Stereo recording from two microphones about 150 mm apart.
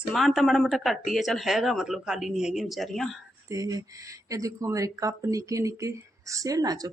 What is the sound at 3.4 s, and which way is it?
Speech, 25° right (ahead or behind).